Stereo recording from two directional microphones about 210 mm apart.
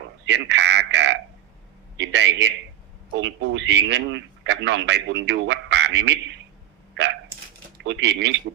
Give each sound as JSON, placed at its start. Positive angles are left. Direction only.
{"t": 0.3, "sound": "a sound", "side_deg": -55}
{"t": 2.0, "sound": "a man's voice", "side_deg": -60}
{"t": 7.0, "sound": "hiccup", "side_deg": -60}
{"t": 7.9, "sound": "a man's voice", "side_deg": -60}